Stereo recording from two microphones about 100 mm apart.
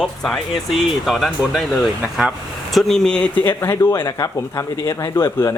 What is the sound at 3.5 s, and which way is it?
Speech, 25° left (ahead or behind).